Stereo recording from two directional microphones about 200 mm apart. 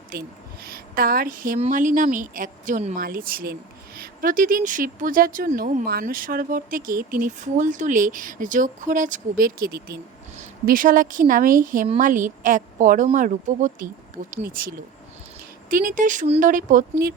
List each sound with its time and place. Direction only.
0.1 s a woman's voice: 50° right (ahead or behind)